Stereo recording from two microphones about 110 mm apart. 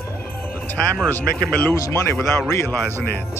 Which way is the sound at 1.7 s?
25° left (ahead or behind).